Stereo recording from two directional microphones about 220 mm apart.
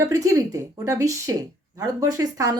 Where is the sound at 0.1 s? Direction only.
15° right (ahead or behind).